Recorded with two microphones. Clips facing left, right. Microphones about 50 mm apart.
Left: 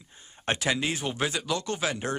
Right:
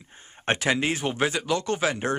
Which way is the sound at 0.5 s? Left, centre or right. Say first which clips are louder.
Right 3 dB; right.